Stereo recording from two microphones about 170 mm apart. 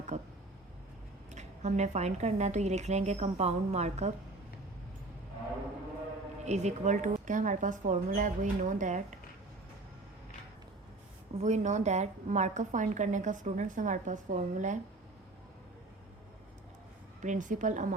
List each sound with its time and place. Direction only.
0.1 s a woman's voice: 45° right (ahead or behind)
1.3 s a woman's voice: 45° right (ahead or behind)
6.4 s a woman's voice: 40° right (ahead or behind)
11.3 s a woman's voice: 45° right (ahead or behind)
17.2 s a woman's voice: 50° right (ahead or behind)